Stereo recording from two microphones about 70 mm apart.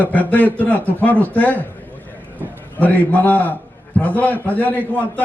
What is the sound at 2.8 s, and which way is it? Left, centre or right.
A man's voice, left.